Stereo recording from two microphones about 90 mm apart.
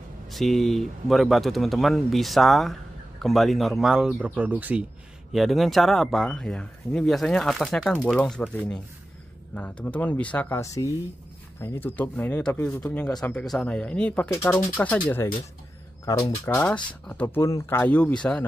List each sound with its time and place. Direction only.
0.3 s speech: centre (ahead or behind); by 4.8 s 15° right (ahead or behind)
5.3 s speech: centre (ahead or behind); by 10.5 s 15° left (ahead or behind)
10.5 s speech: 35° left (ahead or behind)
11.6 s speech: 25° left (ahead or behind)
16.1 s speech: 35° left (ahead or behind)
16.4 s speech: 15° left (ahead or behind)
17.4 s speech: 30° left (ahead or behind)
17.8 s speech: 15° left (ahead or behind)